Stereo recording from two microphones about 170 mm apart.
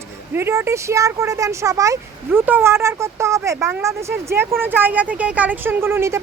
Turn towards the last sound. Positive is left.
turn(degrees=-15)  # may be behind; listen again after turning